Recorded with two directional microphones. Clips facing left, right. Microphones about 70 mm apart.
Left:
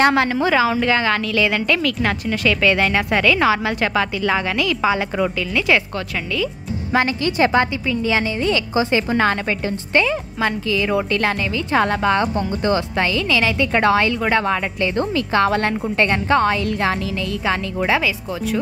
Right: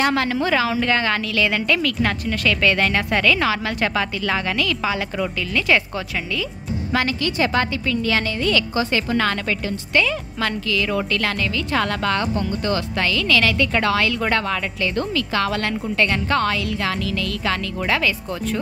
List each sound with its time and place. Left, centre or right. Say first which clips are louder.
0.3 s a woman's voice: left 3 dB; centre
6.9 s speech: left 4 dB; left
14.1 s a woman's voice: left 2 dB; centre
14.4 s a woman's voice: left 3 dB; left